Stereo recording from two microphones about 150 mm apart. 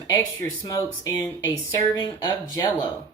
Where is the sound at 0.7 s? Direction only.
25° left (ahead or behind).